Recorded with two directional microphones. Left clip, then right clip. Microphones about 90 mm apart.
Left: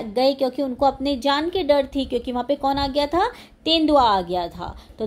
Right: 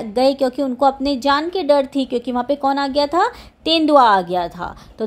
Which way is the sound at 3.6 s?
35° right (ahead or behind).